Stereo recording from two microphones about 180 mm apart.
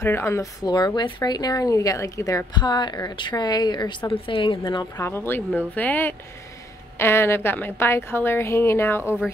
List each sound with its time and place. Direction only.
0.0 s speech: 15° left (ahead or behind)
4.9 s a woman's voice: 15° left (ahead or behind)
9.0 s speech: 10° right (ahead or behind)